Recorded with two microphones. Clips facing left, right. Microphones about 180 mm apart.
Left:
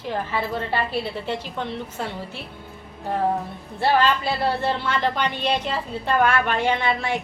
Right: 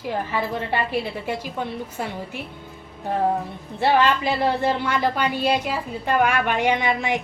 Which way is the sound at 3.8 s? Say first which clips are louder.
Right 1 dB; 15° right (ahead or behind).